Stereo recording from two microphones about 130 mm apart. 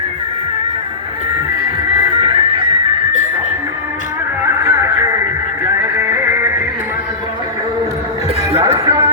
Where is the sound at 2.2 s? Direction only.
40° right (ahead or behind).